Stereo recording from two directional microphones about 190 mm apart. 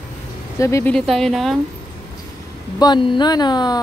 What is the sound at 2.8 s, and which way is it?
Speech, 25° left (ahead or behind).